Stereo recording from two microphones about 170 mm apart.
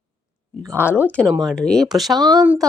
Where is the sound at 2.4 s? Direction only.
10° right (ahead or behind).